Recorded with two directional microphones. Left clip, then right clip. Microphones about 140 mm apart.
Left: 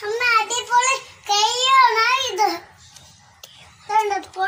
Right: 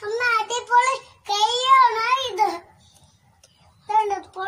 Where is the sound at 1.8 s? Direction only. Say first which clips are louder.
Left 3 dB; 25° right (ahead or behind).